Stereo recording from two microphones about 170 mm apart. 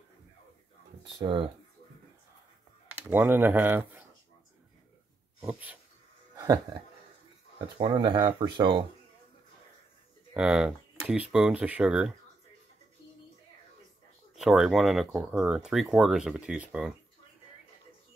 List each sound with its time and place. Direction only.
1.1 s speech: 30° right (ahead or behind)
3.1 s speech: 10° right (ahead or behind)
5.5 s speech: 10° right (ahead or behind)
6.3 s speech: 20° right (ahead or behind)
10.3 s speech: 5° right (ahead or behind)
14.3 s speech: centre (ahead or behind)